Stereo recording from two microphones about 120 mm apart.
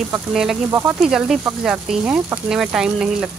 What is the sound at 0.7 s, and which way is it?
Speech, 20° right (ahead or behind).